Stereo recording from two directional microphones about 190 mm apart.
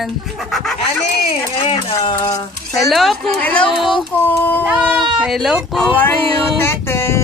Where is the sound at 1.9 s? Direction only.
15° left (ahead or behind).